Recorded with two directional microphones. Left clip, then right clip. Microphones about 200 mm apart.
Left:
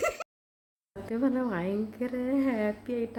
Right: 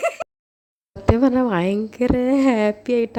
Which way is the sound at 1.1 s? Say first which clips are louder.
Right 12 dB; 40° right (ahead or behind).